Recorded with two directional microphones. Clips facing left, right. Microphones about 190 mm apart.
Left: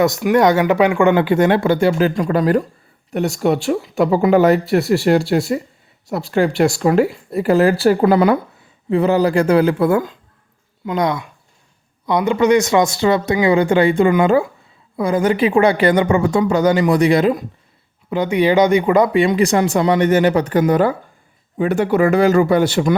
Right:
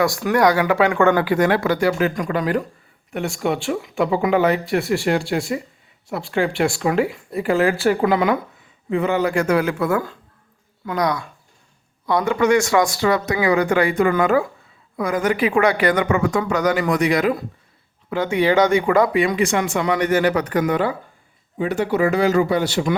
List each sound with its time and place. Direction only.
0.0 s speech: 20° left (ahead or behind)
18.1 s speech: 15° left (ahead or behind)
21.6 s speech: 55° left (ahead or behind)